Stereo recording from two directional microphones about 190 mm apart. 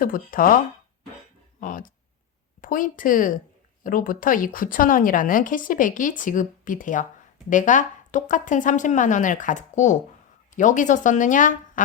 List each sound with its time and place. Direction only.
0.0 s speech: 45° left (ahead or behind)
1.6 s speech: 45° left (ahead or behind)